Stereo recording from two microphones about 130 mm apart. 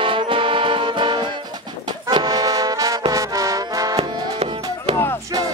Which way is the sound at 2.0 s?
30° right (ahead or behind).